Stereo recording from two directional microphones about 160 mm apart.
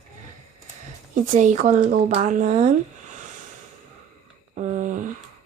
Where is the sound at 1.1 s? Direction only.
50° right (ahead or behind).